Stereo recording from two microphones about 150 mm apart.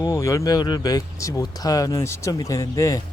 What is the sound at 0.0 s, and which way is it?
Speech, 20° left (ahead or behind).